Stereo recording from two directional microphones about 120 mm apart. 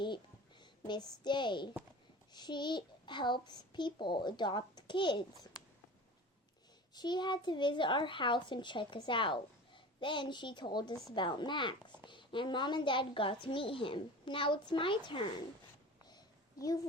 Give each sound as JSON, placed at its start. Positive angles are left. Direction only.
{"t": 0.6, "sound": "a woman's voice", "side_deg": 35}
{"t": 6.9, "sound": "a child's voice", "side_deg": 35}
{"t": 16.0, "sound": "a sound", "side_deg": 35}